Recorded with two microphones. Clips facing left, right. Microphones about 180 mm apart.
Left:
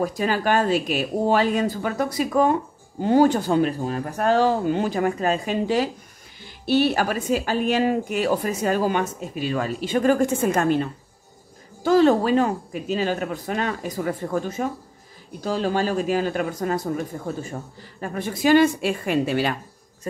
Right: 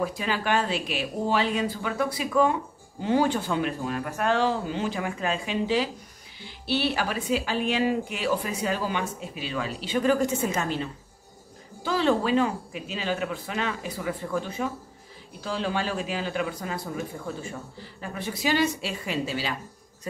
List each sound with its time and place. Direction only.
0.0 s a woman's voice: 45° left (ahead or behind)